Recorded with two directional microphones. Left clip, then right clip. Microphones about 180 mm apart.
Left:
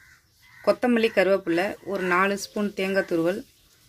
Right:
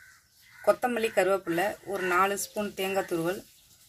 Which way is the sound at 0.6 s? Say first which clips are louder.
Left 4 dB; 40° left (ahead or behind).